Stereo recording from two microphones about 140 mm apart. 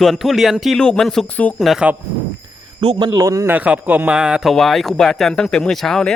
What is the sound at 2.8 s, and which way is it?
Speech, 45° right (ahead or behind).